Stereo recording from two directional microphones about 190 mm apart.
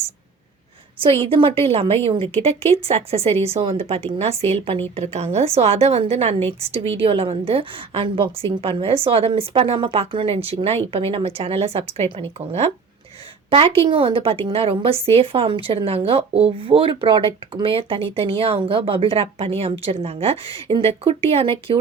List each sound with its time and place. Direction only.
1.0 s a woman's voice: 30° right (ahead or behind)